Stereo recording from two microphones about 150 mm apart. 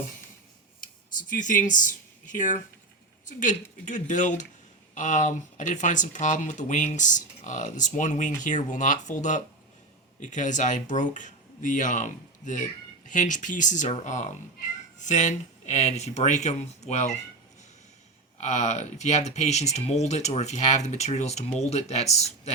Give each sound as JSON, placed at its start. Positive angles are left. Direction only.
{"t": 0.8, "sound": "speech", "side_deg": 60}
{"t": 18.3, "sound": "speech", "side_deg": 50}